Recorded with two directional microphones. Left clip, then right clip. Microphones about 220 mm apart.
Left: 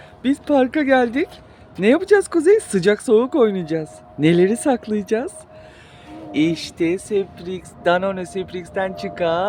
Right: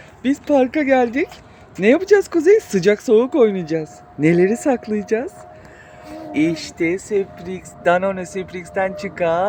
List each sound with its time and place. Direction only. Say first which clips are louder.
0.2 s speech: right 1 dB; centre (ahead or behind)
4.4 s speech: right 1 dB; 20° left (ahead or behind)
6.3 s speech: even; 20° left (ahead or behind)